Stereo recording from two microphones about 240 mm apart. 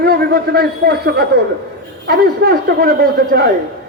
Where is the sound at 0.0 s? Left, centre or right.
Right.